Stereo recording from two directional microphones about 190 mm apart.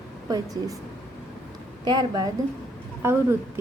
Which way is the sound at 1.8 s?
20° right (ahead or behind).